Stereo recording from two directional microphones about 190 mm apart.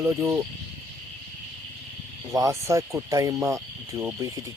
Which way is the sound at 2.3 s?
15° right (ahead or behind).